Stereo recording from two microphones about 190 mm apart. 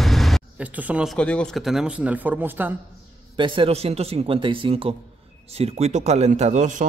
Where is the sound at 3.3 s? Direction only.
25° right (ahead or behind).